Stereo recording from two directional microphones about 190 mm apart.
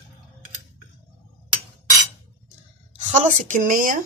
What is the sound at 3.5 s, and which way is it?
Speech, 45° right (ahead or behind).